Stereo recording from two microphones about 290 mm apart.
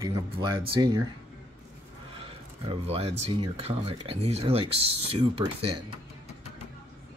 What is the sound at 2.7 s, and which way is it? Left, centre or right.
Speech, centre.